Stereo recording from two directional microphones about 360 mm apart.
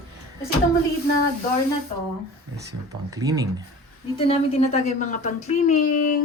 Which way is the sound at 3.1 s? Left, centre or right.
Centre.